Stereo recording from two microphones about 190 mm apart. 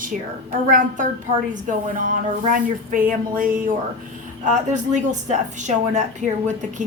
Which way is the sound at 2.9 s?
45° right (ahead or behind).